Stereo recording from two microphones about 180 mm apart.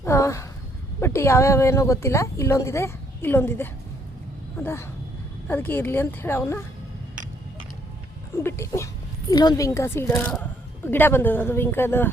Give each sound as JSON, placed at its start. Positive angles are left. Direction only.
{"t": 0.0, "sound": "a sound", "side_deg": 15}
{"t": 1.0, "sound": "a woman's voice", "side_deg": 15}
{"t": 8.4, "sound": "a woman's voice", "side_deg": 15}